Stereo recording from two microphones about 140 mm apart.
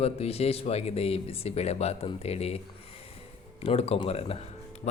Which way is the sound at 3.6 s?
45° left (ahead or behind).